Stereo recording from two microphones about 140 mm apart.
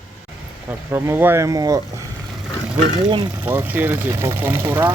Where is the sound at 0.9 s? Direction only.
20° right (ahead or behind).